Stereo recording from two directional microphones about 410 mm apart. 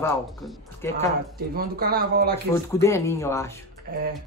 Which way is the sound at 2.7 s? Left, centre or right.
Centre.